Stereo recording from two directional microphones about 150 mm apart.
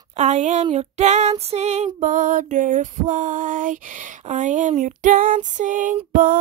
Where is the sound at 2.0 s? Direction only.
55° right (ahead or behind).